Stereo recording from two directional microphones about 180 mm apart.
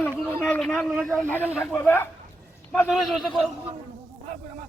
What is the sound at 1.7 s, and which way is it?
Speech, 10° left (ahead or behind).